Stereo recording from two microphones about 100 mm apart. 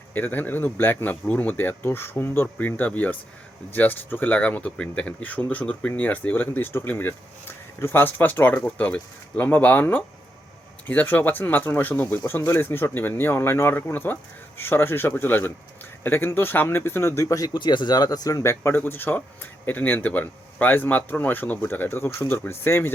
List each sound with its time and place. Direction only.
0.1 s speech: 20° left (ahead or behind)